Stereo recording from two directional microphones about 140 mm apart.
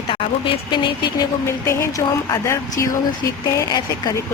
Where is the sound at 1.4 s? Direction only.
20° left (ahead or behind).